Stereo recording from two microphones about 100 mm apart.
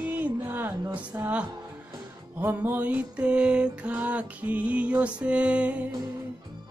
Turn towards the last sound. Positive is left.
turn(degrees=-10)  # may be behind; listen again after turning